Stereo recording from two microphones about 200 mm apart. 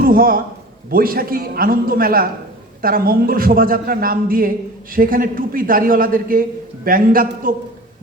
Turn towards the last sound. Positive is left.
turn(degrees=-45)  # may be behind; listen again after turning